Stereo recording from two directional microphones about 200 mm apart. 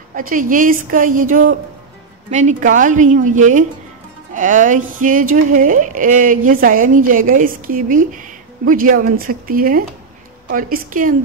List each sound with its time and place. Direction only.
0.1 s a woman's voice: 45° right (ahead or behind)